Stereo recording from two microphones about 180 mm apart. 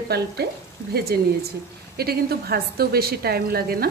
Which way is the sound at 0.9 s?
60° right (ahead or behind).